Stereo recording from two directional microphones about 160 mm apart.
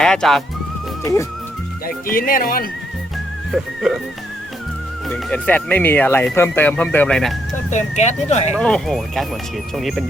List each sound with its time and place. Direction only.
0.0 s speech: 5° left (ahead or behind)
1.0 s music: 20° left (ahead or behind)
1.9 s speech: 60° left (ahead or behind)
3.5 s speech: centre (ahead or behind)
5.0 s speech: 5° left (ahead or behind)
7.7 s speech: 45° left (ahead or behind)
8.5 s speech: 5° left (ahead or behind)